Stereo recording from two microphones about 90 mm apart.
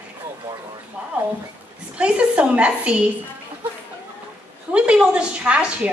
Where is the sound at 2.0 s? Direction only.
10° right (ahead or behind).